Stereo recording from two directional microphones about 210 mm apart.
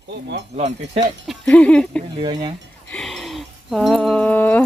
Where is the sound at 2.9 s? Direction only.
Centre (ahead or behind).